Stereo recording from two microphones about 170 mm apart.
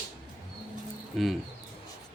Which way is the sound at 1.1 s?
Centre (ahead or behind).